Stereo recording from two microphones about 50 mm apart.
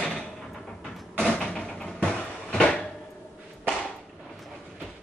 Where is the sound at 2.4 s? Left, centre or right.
Left.